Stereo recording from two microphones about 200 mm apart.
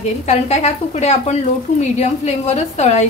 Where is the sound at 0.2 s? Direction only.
35° left (ahead or behind).